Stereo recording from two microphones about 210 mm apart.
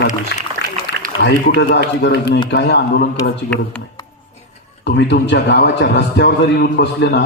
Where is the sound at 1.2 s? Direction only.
55° left (ahead or behind).